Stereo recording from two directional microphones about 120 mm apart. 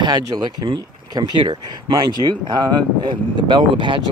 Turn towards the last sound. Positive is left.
turn(degrees=-40)  # may be behind; listen again after turning